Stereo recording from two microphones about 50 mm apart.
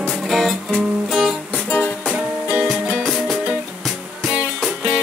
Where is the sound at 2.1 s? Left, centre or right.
Right.